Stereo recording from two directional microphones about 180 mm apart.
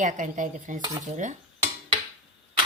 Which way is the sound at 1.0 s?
45° right (ahead or behind).